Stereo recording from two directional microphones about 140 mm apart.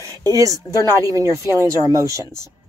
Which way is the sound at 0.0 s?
25° right (ahead or behind).